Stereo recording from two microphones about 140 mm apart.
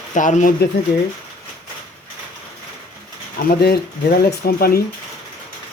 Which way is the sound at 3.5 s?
90° left.